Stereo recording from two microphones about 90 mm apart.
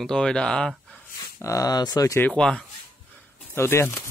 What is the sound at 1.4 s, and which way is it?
Speech, 35° left (ahead or behind).